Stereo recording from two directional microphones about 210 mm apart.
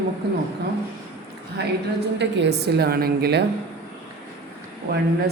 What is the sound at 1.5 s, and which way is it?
A man's voice, 55° right (ahead or behind).